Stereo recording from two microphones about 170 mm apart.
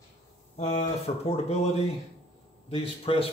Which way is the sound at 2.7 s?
35° left (ahead or behind).